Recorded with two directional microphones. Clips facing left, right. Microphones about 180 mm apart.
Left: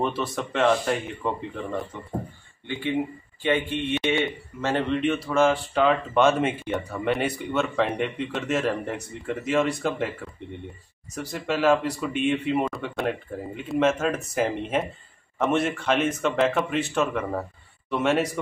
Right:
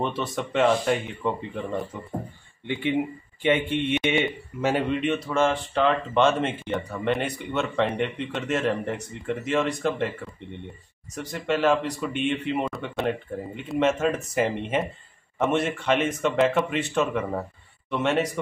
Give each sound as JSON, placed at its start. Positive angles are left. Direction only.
{"t": 0.0, "sound": "a man's voice", "side_deg": 0}
{"t": 2.6, "sound": "a man's voice", "side_deg": -20}
{"t": 11.1, "sound": "a man's voice", "side_deg": 5}